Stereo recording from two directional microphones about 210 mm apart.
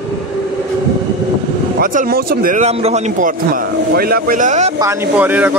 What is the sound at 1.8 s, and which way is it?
Speech, 40° right (ahead or behind).